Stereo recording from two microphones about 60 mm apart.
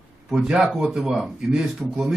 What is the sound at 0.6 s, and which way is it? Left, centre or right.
Speech, centre.